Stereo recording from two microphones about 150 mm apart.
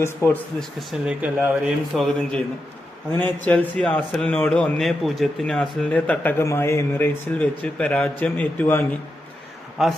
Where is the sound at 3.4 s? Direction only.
10° left (ahead or behind).